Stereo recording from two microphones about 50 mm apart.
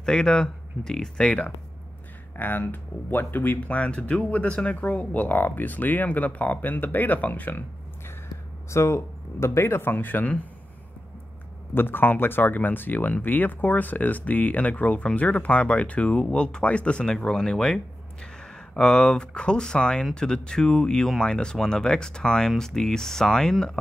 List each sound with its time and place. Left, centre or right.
0.0 s speech: centre
1.2 s speech: left
2.3 s speech: left
3.6 s speech: left
8.6 s speech: left
11.7 s speech: left; by 23.8 s centre